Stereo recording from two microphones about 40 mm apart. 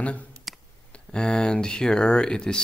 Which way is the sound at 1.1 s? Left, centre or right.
Left.